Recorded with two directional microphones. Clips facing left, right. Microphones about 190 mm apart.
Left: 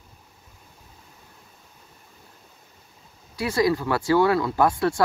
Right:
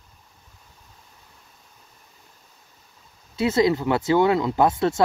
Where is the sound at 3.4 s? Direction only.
25° right (ahead or behind).